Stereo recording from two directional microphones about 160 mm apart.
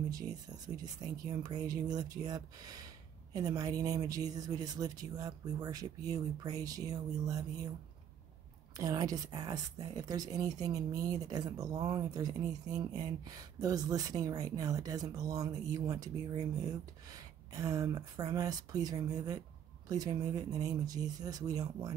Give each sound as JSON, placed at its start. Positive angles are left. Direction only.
{"t": 0.7, "sound": "speech", "side_deg": -25}
{"t": 8.7, "sound": "speech", "side_deg": -20}